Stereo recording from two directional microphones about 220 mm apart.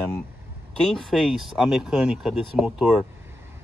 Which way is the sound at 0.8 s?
5° left (ahead or behind).